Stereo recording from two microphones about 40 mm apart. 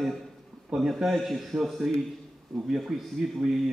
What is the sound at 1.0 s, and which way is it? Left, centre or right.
Speech, centre.